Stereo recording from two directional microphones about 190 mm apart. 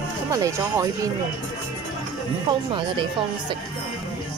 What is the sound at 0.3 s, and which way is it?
Speech, 20° right (ahead or behind).